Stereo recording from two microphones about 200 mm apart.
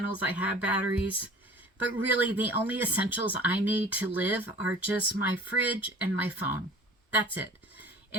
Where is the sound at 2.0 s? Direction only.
10° right (ahead or behind).